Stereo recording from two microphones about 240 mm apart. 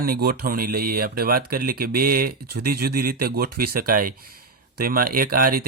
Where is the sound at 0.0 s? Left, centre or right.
Right.